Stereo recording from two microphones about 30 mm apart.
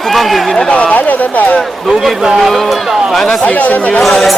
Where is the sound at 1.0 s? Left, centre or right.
Left.